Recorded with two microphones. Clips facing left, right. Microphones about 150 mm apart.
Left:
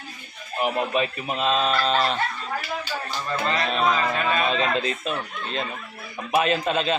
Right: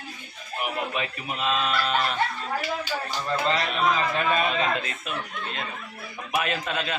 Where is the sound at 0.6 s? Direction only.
30° left (ahead or behind).